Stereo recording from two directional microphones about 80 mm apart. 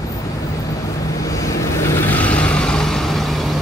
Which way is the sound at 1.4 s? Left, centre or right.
Left.